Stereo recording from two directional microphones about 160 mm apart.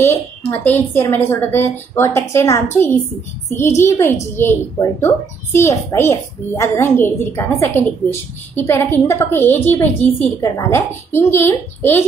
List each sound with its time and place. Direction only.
0.5 s a child's voice: 15° left (ahead or behind)